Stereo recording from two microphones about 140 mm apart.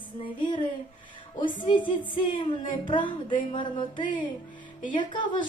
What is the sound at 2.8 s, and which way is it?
Speech, 35° left (ahead or behind).